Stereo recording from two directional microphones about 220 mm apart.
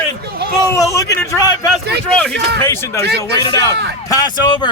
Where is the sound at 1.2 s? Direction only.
15° left (ahead or behind).